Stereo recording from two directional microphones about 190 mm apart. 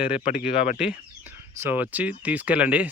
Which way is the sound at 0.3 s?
40° left (ahead or behind).